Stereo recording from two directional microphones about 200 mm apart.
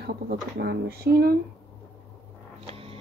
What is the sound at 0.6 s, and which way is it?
Speech, 50° right (ahead or behind).